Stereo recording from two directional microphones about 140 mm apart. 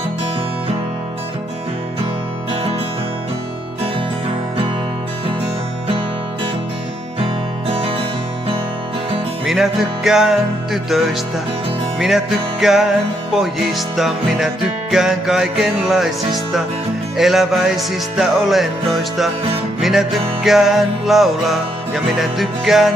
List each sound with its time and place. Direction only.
7.6 s music: 40° right (ahead or behind)
9.4 s music: centre (ahead or behind)